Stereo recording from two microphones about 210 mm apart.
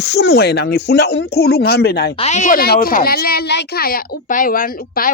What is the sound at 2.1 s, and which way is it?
A woman's voice, 30° left (ahead or behind).